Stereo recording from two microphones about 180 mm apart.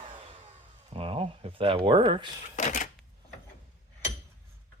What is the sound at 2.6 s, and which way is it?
Cash register, 45° left (ahead or behind).